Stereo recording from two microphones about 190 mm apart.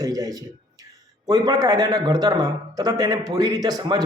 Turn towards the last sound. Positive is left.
turn(degrees=-20)  # may be behind; listen again after turning